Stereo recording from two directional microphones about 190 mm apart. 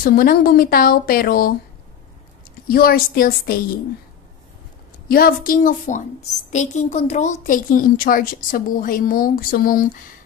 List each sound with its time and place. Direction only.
0.0 s speech: 50° left (ahead or behind)
2.7 s speech: 50° left (ahead or behind)
5.0 s speech: 50° left (ahead or behind)